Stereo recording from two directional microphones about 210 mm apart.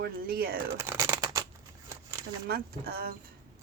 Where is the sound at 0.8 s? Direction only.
10° right (ahead or behind).